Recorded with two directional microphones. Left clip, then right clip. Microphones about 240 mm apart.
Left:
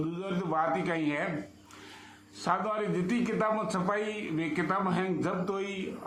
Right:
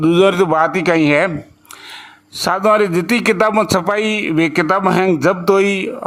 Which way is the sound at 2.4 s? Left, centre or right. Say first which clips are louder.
Right 17 dB; right.